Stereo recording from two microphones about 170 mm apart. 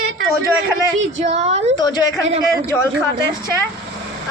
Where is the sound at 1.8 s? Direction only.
25° left (ahead or behind).